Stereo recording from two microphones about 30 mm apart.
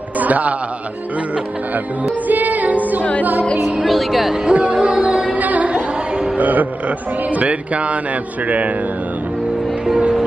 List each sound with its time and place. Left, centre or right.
0.2 s a man's voice: right
2.2 s music: right
3.8 s speech: centre
4.5 s music: right
5.4 s music: right
7.2 s music: right